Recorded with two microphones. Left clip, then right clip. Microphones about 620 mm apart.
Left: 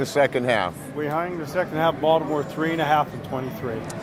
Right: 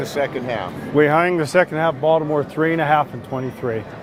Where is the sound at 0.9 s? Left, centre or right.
Right.